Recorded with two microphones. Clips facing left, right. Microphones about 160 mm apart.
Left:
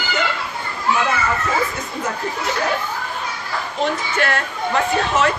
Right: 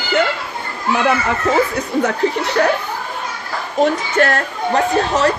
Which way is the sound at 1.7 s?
70° right (ahead or behind).